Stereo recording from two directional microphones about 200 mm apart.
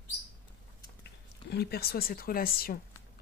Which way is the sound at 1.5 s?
55° left (ahead or behind).